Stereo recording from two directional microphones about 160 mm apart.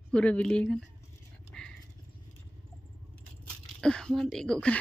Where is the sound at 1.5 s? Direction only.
5° left (ahead or behind).